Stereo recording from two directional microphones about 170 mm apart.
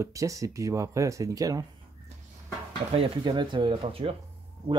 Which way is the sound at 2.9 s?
30° right (ahead or behind).